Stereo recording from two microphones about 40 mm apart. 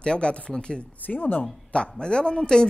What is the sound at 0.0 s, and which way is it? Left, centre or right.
Speech, left.